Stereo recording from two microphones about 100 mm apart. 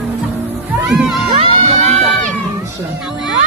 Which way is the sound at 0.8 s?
5° right (ahead or behind).